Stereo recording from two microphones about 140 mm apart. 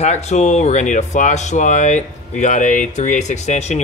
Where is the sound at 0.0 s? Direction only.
55° left (ahead or behind).